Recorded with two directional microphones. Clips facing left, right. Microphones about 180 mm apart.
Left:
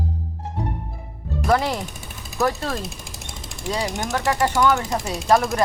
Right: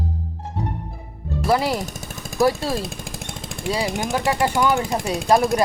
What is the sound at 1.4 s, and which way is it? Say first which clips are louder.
Speech: even; 5° right (ahead or behind).